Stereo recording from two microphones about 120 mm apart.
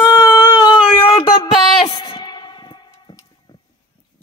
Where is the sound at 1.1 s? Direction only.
30° left (ahead or behind).